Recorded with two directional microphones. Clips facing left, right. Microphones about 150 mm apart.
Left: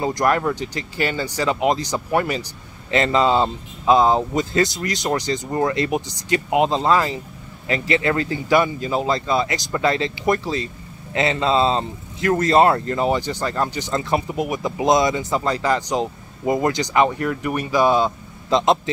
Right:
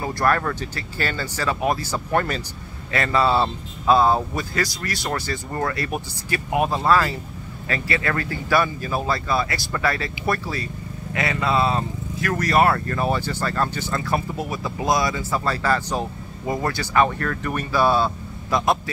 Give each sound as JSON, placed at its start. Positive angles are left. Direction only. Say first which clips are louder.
{"t": 0.0, "sound": "speech", "louder": "left 3 dB", "side_deg": 15}
{"t": 2.9, "sound": "speech", "louder": "left 3 dB", "side_deg": 20}